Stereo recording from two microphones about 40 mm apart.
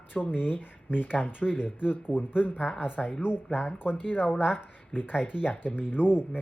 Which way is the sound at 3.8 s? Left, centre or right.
Left.